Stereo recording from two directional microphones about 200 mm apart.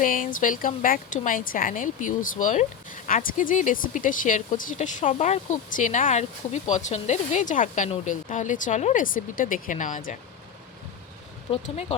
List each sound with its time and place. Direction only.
0.0 s a woman's voice: 40° left (ahead or behind)
11.5 s a woman's voice: 30° left (ahead or behind)